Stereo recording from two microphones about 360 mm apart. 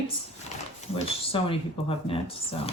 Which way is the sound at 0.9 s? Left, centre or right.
Centre.